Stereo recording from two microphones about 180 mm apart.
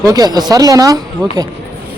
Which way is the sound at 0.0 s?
20° right (ahead or behind).